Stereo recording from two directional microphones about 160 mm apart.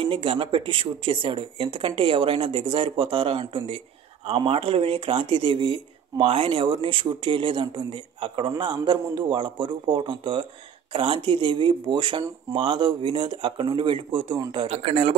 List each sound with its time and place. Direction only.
0.0 s speech: 35° right (ahead or behind)